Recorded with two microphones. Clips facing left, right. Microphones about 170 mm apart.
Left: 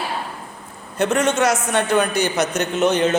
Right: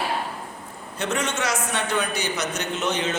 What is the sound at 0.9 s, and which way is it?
A man's voice, 50° left (ahead or behind).